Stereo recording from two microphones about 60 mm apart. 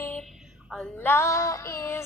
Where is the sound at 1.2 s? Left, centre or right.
Left.